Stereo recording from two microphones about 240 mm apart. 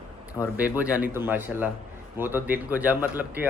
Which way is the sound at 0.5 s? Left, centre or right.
Centre.